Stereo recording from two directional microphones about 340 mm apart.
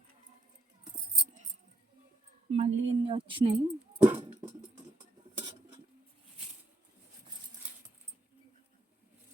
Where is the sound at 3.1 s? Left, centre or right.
Centre.